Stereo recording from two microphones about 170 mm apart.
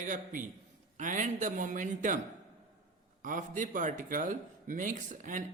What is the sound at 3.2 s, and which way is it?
Speech, 50° right (ahead or behind).